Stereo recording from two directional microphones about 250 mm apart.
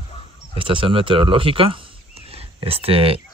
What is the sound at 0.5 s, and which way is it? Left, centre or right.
Speech, right.